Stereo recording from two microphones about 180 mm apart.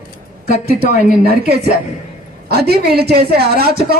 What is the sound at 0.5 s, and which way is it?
Speech, 60° right (ahead or behind).